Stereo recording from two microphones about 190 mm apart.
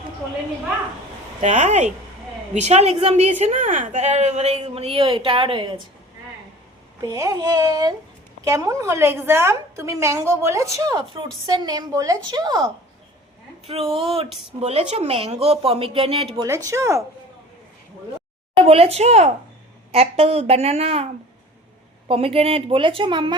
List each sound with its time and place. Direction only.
1.4 s a woman's voice: 40° right (ahead or behind)
7.0 s a woman's voice: 20° right (ahead or behind)
13.7 s a woman's voice: 30° right (ahead or behind)
16.6 s a woman's voice: 15° right (ahead or behind)
18.6 s a woman's voice: 30° right (ahead or behind)